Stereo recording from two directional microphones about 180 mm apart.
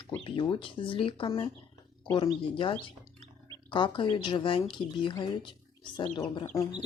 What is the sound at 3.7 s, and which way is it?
Speech, 25° left (ahead or behind).